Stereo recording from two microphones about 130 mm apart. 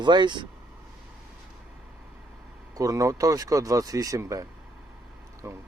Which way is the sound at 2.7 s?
25° right (ahead or behind).